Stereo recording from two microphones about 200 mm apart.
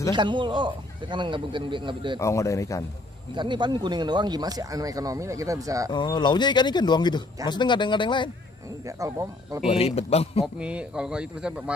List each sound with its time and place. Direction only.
0.1 s speech: 25° right (ahead or behind)
2.1 s speech: 15° left (ahead or behind)
3.3 s speech: 25° right (ahead or behind)
5.9 s speech: 20° left (ahead or behind)
8.8 s speech: 15° right (ahead or behind)
9.7 s a man's voice: 30° left (ahead or behind)
10.4 s speech: 5° right (ahead or behind)